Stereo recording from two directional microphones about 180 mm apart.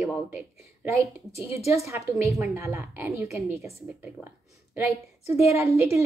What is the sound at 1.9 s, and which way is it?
A woman's voice, 15° right (ahead or behind).